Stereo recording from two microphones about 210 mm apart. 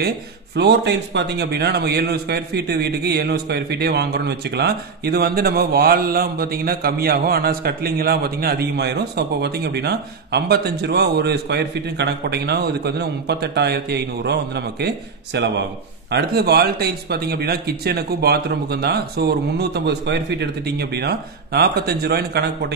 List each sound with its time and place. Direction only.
0.6 s a man's voice: 55° right (ahead or behind)